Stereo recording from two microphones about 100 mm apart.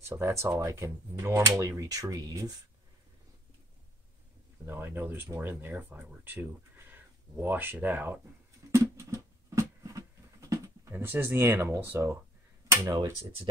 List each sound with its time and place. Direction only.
0.0 s speech: 25° right (ahead or behind)
4.6 s speech: 20° right (ahead or behind)
8.7 s a sound: 30° right (ahead or behind)
12.6 s speech: 35° right (ahead or behind)